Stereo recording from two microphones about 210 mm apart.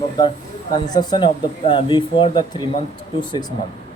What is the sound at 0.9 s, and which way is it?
Speech, 20° left (ahead or behind).